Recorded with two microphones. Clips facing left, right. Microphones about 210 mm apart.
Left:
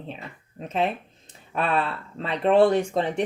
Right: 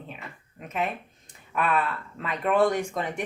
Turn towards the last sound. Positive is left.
turn(degrees=30)  # may be behind; listen again after turning